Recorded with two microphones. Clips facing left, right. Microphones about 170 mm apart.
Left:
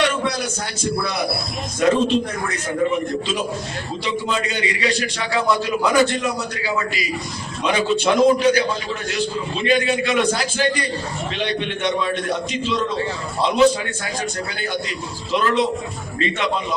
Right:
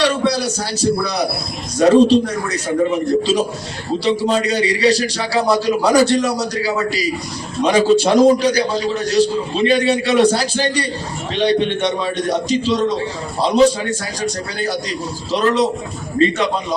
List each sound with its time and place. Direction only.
0.0 s a sound: 35° right (ahead or behind)
1.8 s a man's voice: 35° right (ahead or behind)
14.2 s a man's voice: 40° right (ahead or behind)